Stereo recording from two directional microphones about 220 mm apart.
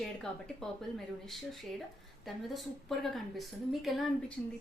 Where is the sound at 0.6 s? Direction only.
Centre (ahead or behind).